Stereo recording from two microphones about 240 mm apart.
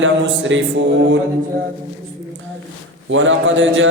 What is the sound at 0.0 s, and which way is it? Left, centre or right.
Mantra, right.